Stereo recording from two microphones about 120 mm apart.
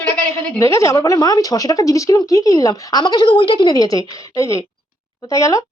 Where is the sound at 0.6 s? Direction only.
25° left (ahead or behind).